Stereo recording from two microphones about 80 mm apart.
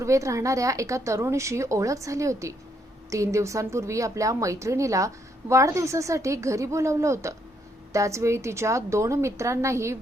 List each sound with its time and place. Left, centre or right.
0.0 s speech: right